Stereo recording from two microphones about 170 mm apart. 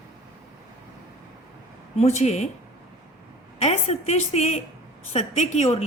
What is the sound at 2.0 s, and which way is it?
Speech, 40° left (ahead or behind).